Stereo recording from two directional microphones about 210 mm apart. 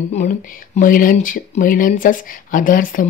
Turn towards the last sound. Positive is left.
turn(degrees=40)  # may be behind; listen again after turning